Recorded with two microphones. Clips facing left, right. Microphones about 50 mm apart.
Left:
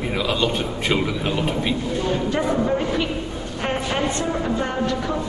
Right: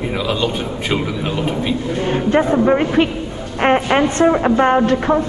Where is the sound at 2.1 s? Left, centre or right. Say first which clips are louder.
Right 8 dB; right.